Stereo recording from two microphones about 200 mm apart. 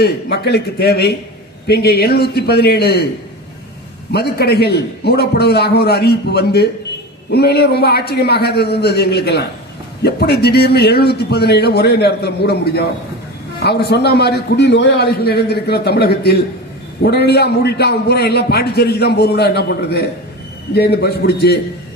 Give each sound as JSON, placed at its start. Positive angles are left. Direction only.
{"t": 0.0, "sound": "a man's voice", "side_deg": 55}
{"t": 4.1, "sound": "a man's voice", "side_deg": 55}